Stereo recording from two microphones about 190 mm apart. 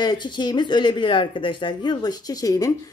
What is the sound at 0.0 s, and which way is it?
Speech, 20° left (ahead or behind).